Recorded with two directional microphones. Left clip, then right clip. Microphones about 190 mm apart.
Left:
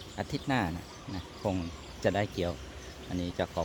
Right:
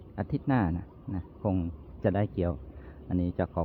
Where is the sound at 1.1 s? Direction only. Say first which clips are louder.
Right 1 dB; 30° right (ahead or behind).